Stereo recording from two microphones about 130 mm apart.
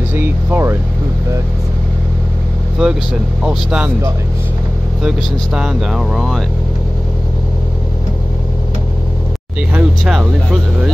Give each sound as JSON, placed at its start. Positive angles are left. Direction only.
{"t": 0.1, "sound": "air conditioning", "side_deg": -15}
{"t": 2.8, "sound": "speech", "side_deg": -5}
{"t": 5.0, "sound": "speech", "side_deg": -5}
{"t": 9.8, "sound": "speech", "side_deg": 0}